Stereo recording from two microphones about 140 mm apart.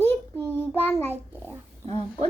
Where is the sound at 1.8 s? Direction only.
50° right (ahead or behind).